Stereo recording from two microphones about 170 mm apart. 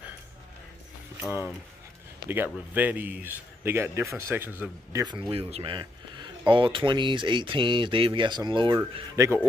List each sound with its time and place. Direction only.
2.2 s a man's voice: 10° right (ahead or behind)
5.3 s speech: 35° right (ahead or behind)